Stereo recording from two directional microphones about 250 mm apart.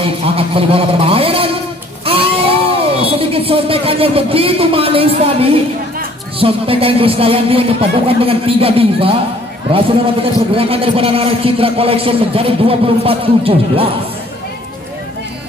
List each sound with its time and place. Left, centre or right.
0.0 s a man's voice: right
10.5 s a man's voice: right